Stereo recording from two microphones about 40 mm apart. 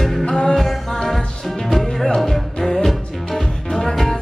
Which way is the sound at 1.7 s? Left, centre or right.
Centre.